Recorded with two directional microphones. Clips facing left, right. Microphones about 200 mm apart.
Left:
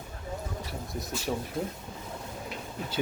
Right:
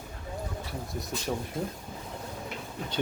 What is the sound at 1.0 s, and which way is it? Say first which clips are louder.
Speech: left 1 dB; centre (ahead or behind).